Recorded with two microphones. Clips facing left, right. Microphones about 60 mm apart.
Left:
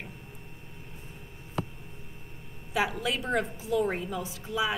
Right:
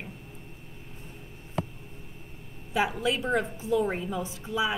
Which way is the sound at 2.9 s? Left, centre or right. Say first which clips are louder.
Right 3 dB; right.